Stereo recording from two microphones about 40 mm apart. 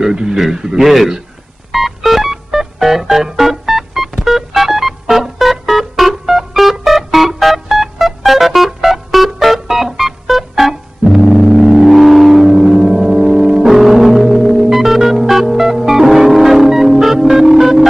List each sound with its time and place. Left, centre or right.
0.0 s a man's voice: centre
1.7 s music: centre